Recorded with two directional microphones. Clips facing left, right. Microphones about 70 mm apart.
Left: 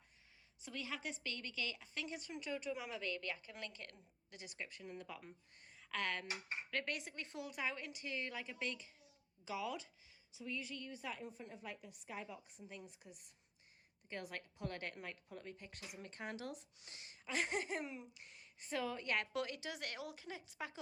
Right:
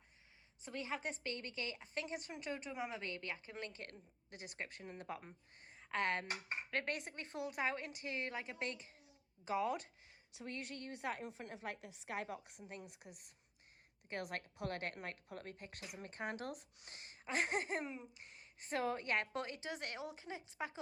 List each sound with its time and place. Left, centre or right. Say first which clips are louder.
0.6 s a woman's voice: right 3 dB; right
5.2 s a woman's voice: even; right